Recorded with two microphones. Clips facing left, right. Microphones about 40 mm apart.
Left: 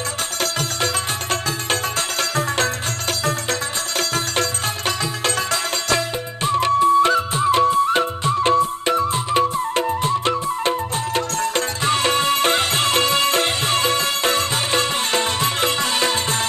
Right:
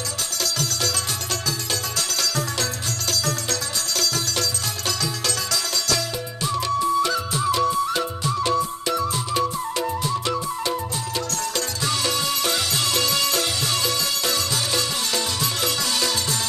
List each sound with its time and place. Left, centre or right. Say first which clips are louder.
2.3 s music: left 6 dB; left
11.1 s music: left 5 dB; left